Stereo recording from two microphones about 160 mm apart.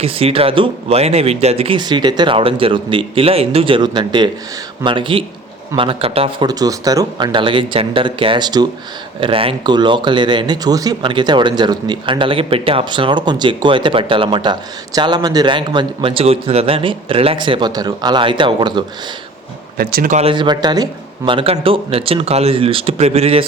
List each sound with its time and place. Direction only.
0.0 s speech: 35° right (ahead or behind)
19.7 s speech: 65° right (ahead or behind)
20.1 s speech: 35° right (ahead or behind)